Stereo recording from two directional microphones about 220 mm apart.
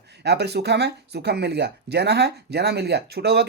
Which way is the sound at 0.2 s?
50° right (ahead or behind).